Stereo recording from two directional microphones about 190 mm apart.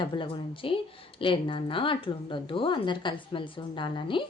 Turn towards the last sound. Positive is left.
turn(degrees=25)  # may be behind; listen again after turning